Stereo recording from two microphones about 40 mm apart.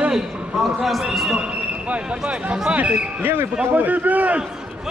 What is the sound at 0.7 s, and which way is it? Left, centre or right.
Speech, centre.